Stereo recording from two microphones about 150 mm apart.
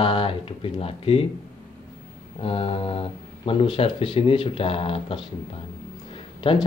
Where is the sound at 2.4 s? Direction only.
40° left (ahead or behind).